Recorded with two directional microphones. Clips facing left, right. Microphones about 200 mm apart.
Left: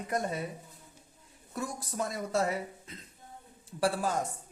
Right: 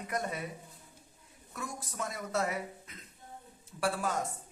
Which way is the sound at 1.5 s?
35° left (ahead or behind).